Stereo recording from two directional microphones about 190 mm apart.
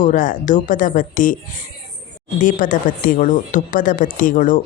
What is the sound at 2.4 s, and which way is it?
A woman's voice, 45° left (ahead or behind).